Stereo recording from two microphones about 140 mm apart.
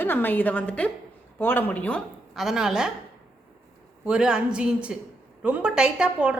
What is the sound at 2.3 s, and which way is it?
Speech, 5° right (ahead or behind).